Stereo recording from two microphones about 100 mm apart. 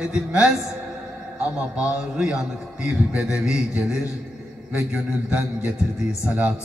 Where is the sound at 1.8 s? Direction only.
10° right (ahead or behind).